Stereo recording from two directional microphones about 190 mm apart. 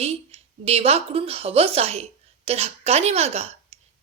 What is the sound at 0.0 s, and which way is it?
A woman's voice, 30° right (ahead or behind).